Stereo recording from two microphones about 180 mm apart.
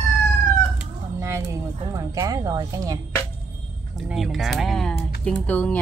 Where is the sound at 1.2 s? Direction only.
15° right (ahead or behind).